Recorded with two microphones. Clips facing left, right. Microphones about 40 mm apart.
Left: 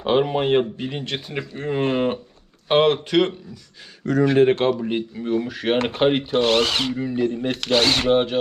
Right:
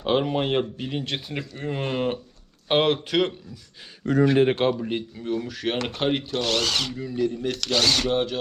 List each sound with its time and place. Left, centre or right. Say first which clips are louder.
0.0 s speech: left 4 dB; centre
1.5 s speech: left 6 dB; centre
2.6 s speech: left 4 dB; centre
4.4 s speech: left 3 dB; centre
4.7 s speech: left 4 dB; centre